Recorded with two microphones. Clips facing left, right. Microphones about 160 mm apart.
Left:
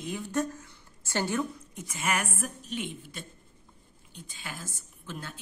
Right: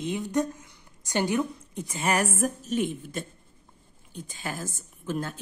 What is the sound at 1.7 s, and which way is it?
A woman's voice, 35° right (ahead or behind).